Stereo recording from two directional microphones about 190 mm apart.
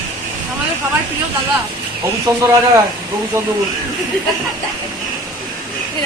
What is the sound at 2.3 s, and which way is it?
Speech, 20° right (ahead or behind).